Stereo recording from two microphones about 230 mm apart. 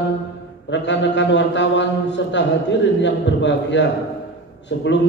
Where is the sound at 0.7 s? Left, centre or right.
Left.